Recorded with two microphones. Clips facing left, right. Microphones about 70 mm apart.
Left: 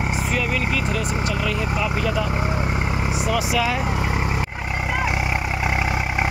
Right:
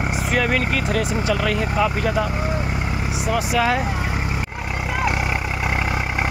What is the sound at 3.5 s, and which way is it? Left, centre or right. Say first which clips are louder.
Speech: right 2 dB; right.